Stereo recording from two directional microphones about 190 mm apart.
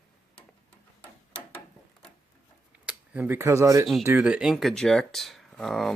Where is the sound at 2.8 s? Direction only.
5° right (ahead or behind).